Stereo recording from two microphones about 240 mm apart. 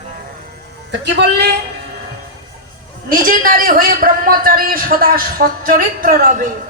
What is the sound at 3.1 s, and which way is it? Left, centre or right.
A man's voice, right.